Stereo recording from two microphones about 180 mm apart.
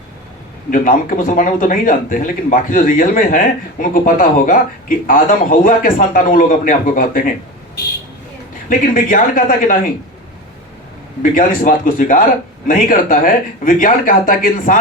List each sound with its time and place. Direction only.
0.7 s speech: 50° left (ahead or behind)
9.0 s speech: 50° left (ahead or behind)
11.2 s speech: 50° left (ahead or behind)